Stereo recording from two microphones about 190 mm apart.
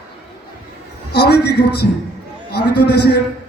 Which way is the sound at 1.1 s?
60° left (ahead or behind).